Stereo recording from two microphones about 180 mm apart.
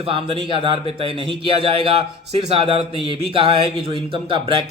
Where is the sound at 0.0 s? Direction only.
30° right (ahead or behind).